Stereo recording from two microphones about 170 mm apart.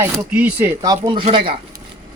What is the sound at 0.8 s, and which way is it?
Speech, 25° right (ahead or behind).